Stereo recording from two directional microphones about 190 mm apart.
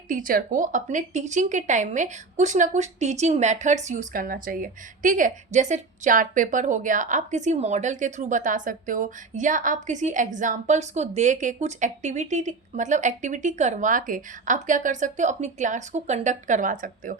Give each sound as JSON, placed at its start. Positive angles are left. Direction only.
{"t": 0.1, "sound": "a woman's voice", "side_deg": -45}